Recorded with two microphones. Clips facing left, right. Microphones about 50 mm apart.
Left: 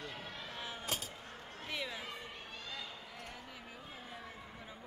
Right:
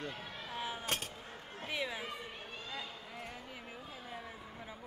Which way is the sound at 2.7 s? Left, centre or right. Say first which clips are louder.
Right 3 dB; right.